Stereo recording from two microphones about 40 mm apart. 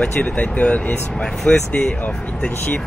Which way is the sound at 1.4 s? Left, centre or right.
Left.